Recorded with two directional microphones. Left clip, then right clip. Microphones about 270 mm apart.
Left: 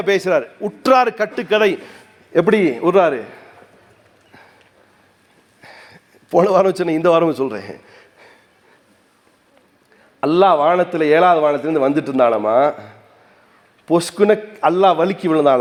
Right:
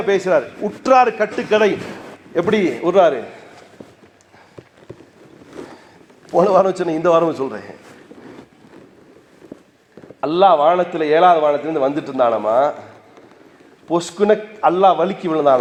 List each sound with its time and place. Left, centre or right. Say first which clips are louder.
0.0 s a man's voice: even; left
6.3 s a man's voice: even; left
10.2 s a man's voice: even; left
13.8 s a man's voice: left 2 dB; left